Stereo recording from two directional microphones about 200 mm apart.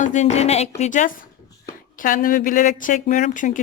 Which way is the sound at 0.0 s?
35° left (ahead or behind).